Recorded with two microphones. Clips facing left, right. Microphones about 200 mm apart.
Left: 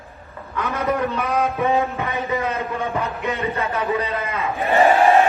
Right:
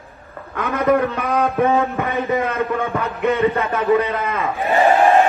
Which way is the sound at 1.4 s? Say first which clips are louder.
Right 3 dB; 55° right (ahead or behind).